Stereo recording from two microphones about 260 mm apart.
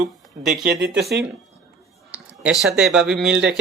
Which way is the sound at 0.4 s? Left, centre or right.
Centre.